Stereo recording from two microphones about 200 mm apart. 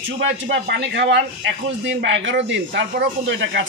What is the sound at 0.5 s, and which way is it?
Speech, 60° right (ahead or behind).